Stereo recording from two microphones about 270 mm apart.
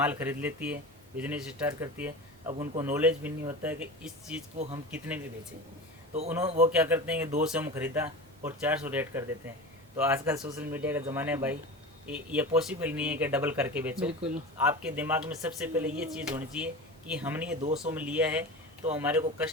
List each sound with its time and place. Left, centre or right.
0.0 s speech: centre
6.4 s a man's voice: right
6.7 s speech: centre
17.6 s a man's voice: right
17.9 s speech: centre